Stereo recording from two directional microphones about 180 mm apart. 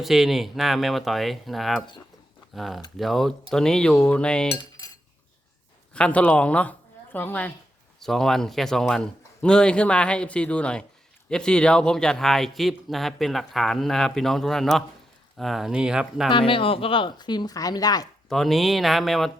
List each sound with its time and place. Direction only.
0.0 s speech: centre (ahead or behind)
5.9 s speech: 5° left (ahead or behind)
16.3 s speech: 30° left (ahead or behind)
18.3 s speech: centre (ahead or behind)